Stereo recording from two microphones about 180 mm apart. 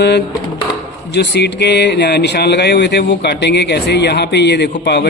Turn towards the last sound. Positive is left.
turn(degrees=70)  # may be behind; listen again after turning